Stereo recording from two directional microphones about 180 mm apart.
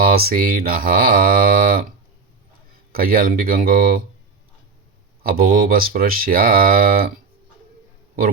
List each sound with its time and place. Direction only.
0.0 s speech: 55° right (ahead or behind)
2.9 s speech: 55° right (ahead or behind)
5.2 s speech: 55° right (ahead or behind)